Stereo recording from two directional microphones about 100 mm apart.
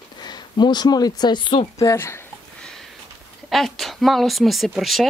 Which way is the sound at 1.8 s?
30° left (ahead or behind).